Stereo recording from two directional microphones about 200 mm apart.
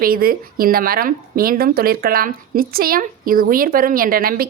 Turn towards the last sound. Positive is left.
turn(degrees=-45)  # may be behind; listen again after turning